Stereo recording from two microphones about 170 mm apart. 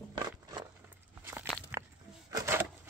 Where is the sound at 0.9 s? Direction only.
10° right (ahead or behind).